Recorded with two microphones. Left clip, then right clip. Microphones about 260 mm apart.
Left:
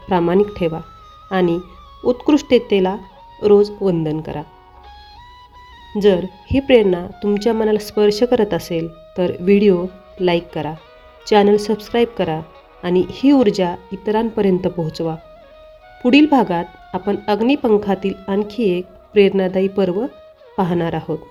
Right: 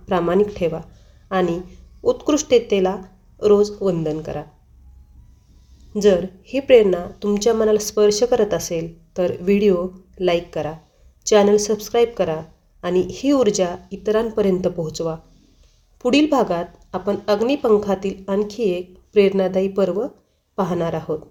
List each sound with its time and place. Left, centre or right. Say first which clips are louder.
0.1 s speech: left 2 dB; left
5.9 s speech: left 1 dB; left